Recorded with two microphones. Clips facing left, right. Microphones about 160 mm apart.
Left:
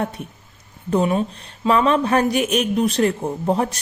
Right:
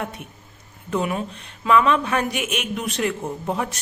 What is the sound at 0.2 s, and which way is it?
Speech, 35° left (ahead or behind).